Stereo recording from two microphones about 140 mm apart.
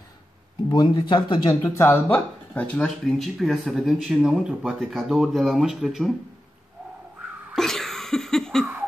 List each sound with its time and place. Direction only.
0.7 s speech: 30° left (ahead or behind)
1.6 s speech: 20° left (ahead or behind); by 6.1 s centre (ahead or behind)
7.5 s a sound: 5° left (ahead or behind)